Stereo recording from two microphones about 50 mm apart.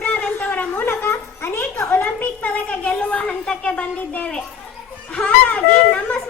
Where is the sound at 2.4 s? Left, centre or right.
Left.